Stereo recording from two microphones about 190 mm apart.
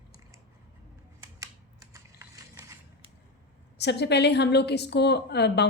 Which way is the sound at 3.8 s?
60° left (ahead or behind).